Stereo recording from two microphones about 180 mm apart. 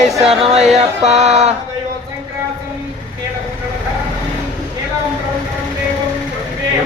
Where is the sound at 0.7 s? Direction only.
40° right (ahead or behind).